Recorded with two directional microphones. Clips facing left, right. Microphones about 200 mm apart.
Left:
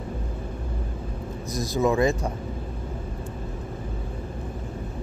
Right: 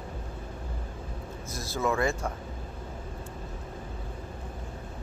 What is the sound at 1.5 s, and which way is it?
Speech, 15° left (ahead or behind).